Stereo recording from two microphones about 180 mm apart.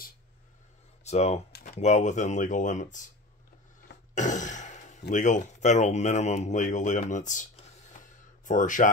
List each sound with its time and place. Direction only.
1.0 s speech: 35° left (ahead or behind)
4.1 s a sound: 45° left (ahead or behind)
5.1 s speech: 45° left (ahead or behind)